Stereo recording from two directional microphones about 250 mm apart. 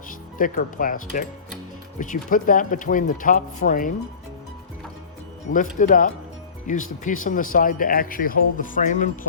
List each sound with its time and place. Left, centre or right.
0.3 s speech: left
5.5 s speech: left